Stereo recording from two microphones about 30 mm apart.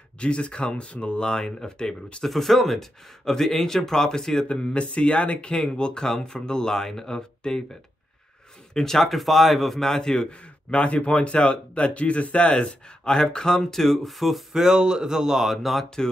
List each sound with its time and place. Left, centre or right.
0.2 s speech: left
1.3 s speech: left
2.2 s speech: centre
4.5 s speech: left
5.5 s speech: left
8.7 s speech: centre
9.8 s speech: centre
10.2 s speech: left
11.9 s speech: left
13.6 s speech: centre
13.9 s speech: centre
14.5 s speech: centre